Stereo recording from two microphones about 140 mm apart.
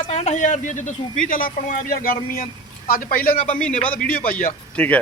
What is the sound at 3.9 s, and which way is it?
Speech, 90° left.